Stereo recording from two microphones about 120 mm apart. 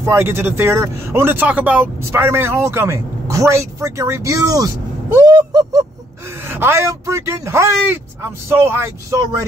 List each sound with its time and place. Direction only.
0.0 s a man's voice: 20° right (ahead or behind)
5.2 s a sound: 30° right (ahead or behind)
6.4 s a man's voice: 20° right (ahead or behind)